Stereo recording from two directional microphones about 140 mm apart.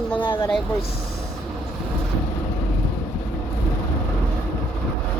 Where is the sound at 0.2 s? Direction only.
35° left (ahead or behind).